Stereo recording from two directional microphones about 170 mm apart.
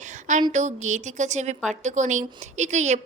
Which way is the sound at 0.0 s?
45° right (ahead or behind).